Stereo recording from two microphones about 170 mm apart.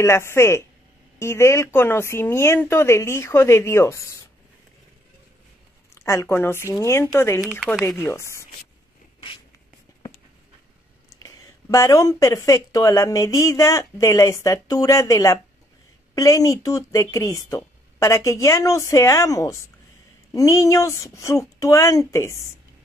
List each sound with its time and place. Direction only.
0.0 s speech: 15° left (ahead or behind)
6.0 s speech: 15° left (ahead or behind)
7.6 s speech: centre (ahead or behind)
8.0 s speech: 15° left (ahead or behind)
11.1 s speech: 20° left (ahead or behind)